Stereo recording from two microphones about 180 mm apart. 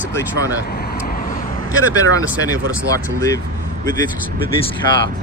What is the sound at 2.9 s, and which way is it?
Speech, 15° left (ahead or behind).